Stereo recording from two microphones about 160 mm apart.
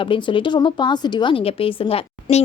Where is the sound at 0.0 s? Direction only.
30° left (ahead or behind).